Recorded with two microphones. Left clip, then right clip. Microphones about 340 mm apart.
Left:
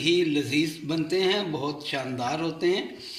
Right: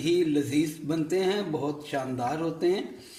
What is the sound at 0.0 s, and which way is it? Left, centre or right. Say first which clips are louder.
Speech: left 2 dB; right.